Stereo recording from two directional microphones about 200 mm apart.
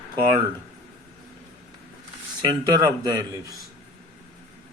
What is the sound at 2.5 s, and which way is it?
Speech, 20° right (ahead or behind).